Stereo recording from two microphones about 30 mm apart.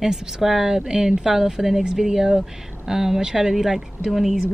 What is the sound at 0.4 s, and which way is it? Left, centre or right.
Speech, centre.